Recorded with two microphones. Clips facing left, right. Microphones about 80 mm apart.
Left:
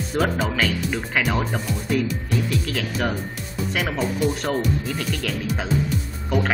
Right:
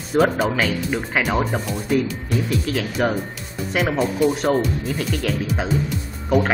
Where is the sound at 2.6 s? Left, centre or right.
Centre.